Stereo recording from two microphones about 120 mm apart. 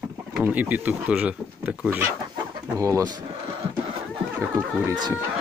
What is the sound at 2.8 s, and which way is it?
Speech, 25° right (ahead or behind).